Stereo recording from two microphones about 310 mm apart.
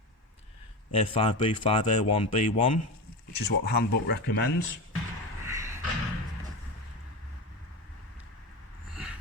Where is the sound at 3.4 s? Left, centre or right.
Left.